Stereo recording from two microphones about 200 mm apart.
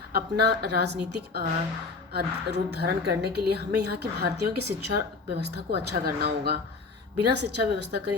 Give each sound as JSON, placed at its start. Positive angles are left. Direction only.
{"t": 0.1, "sound": "a woman's voice", "side_deg": -55}